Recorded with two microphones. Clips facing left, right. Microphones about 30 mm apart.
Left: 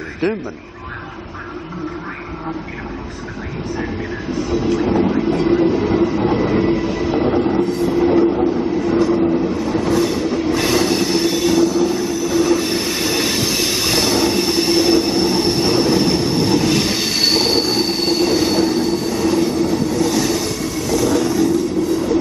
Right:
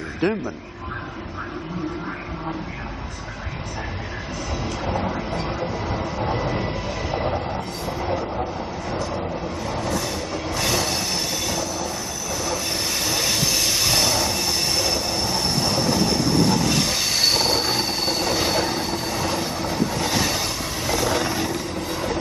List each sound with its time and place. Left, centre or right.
0.2 s train: centre
4.5 s train: centre
5.0 s speech: centre
6.0 s train: centre
18.4 s train: centre
20.8 s vehicle: right